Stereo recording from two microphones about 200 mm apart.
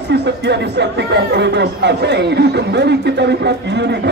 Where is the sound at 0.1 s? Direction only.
60° right (ahead or behind).